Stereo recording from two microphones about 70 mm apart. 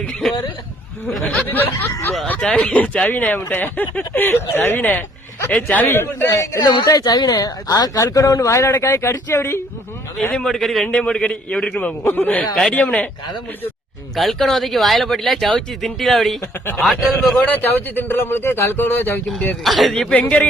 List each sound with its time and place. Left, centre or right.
0.1 s a man's voice: centre
1.5 s speech: left
2.4 s speech: centre
6.0 s speech: left
6.6 s speech: left
6.8 s speech: left
10.3 s speech: centre
10.8 s a man's voice: centre
12.0 s speech: left
12.5 s a man's voice: centre
14.2 s speech: centre
17.4 s speech: left
19.6 s speech: centre